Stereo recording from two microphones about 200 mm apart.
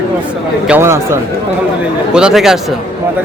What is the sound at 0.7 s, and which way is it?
Speech, 10° right (ahead or behind).